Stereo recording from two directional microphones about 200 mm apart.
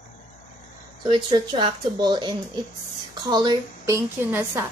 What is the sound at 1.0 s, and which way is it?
A woman's voice, 25° right (ahead or behind).